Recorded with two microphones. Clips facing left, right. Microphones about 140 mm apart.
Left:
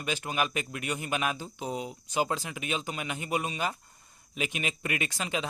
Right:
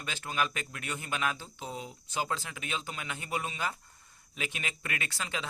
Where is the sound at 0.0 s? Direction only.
15° left (ahead or behind).